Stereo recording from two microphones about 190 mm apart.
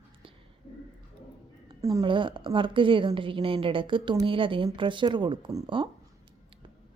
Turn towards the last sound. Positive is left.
turn(degrees=-25)  # may be behind; listen again after turning